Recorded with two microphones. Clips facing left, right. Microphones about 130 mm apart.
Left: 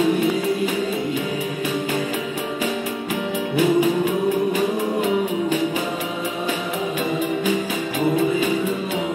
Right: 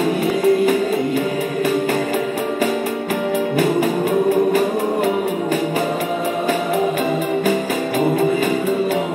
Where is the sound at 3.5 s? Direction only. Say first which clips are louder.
Left 3 dB; 45° right (ahead or behind).